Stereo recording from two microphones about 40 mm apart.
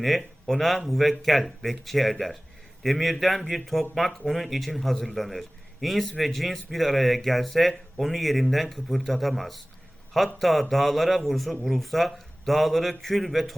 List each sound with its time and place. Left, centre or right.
0.4 s a man's voice: centre